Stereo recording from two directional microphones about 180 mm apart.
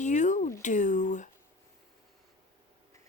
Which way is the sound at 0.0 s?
45° left (ahead or behind).